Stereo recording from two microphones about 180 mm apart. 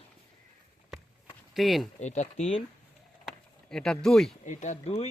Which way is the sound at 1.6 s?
Centre (ahead or behind).